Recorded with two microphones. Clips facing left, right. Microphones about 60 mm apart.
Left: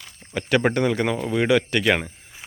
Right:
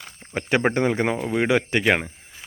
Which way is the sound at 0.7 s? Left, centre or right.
Right.